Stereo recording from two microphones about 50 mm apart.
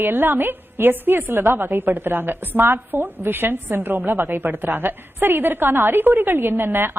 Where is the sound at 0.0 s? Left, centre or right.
Right.